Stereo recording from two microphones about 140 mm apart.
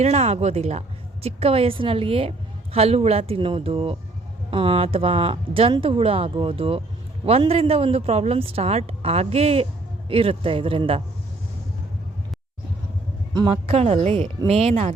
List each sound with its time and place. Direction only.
0.0 s a woman's voice: 50° right (ahead or behind)
13.3 s speech: 35° right (ahead or behind)
13.7 s a woman's voice: 45° right (ahead or behind)